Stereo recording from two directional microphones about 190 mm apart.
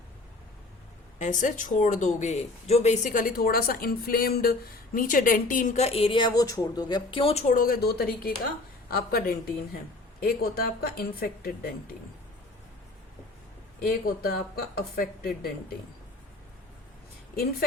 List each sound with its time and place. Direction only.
1.2 s a woman's voice: 40° left (ahead or behind)
13.8 s a woman's voice: 50° left (ahead or behind)